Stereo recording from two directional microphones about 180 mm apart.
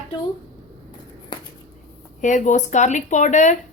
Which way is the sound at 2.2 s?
45° left (ahead or behind).